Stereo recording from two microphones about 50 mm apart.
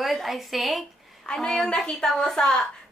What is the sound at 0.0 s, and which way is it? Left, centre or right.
Speech, centre.